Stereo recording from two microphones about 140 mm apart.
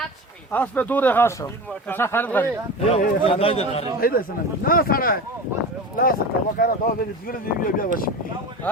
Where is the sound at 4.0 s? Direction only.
90° left.